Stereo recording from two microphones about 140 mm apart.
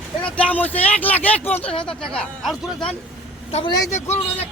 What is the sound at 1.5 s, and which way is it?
Speech, 45° left (ahead or behind).